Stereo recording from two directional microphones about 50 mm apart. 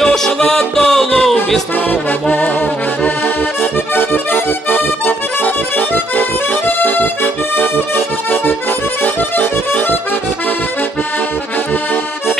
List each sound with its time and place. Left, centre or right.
0.0 s music: centre
1.9 s accordion: left
3.9 s accordion: left
7.5 s music: left
9.0 s accordion: left